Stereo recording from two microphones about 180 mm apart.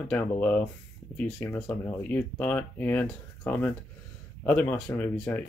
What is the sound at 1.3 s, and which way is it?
Speech, 20° left (ahead or behind).